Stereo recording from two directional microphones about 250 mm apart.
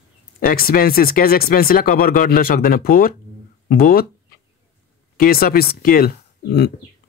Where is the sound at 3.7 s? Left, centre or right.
Left.